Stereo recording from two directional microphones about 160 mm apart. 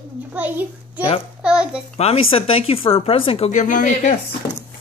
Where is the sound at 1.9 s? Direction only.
40° left (ahead or behind).